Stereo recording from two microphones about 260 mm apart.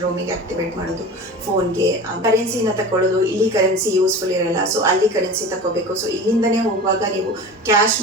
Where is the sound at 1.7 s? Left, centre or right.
Centre.